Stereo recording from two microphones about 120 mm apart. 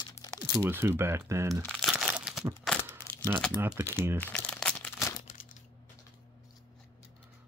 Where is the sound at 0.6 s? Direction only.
20° right (ahead or behind).